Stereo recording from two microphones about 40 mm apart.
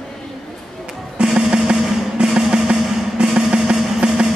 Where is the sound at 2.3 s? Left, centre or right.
Right.